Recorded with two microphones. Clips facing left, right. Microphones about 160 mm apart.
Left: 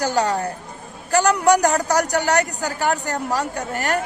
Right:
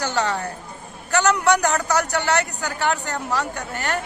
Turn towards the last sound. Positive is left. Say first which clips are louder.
# left 3 dB
turn(degrees=40)  # may be behind; listen again after turning